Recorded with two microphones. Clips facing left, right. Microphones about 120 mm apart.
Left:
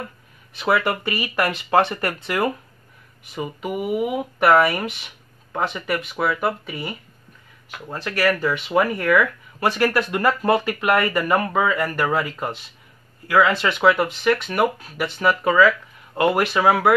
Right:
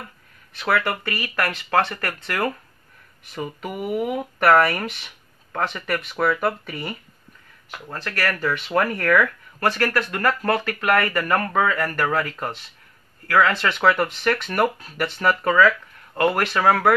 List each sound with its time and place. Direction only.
0.5 s speech: 15° left (ahead or behind)